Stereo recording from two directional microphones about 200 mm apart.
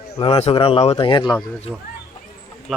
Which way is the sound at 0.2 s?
30° left (ahead or behind).